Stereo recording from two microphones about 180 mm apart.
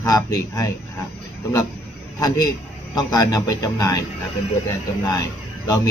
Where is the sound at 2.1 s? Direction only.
20° left (ahead or behind).